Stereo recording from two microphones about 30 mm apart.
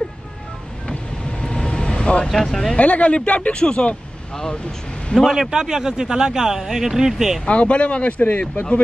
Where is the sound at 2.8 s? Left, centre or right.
Left.